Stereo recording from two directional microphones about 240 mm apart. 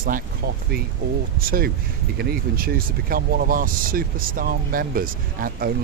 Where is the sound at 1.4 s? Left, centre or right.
Right.